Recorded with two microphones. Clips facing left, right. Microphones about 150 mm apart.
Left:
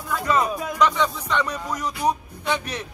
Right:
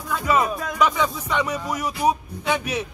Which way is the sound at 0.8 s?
10° right (ahead or behind).